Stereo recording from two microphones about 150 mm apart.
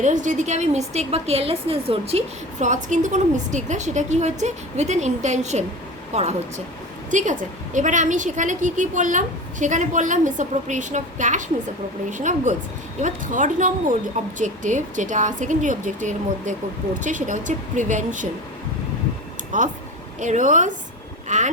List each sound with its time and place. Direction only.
0.0 s a woman's voice: 55° right (ahead or behind)
7.1 s a woman's voice: 55° right (ahead or behind)
19.5 s a woman's voice: 55° right (ahead or behind)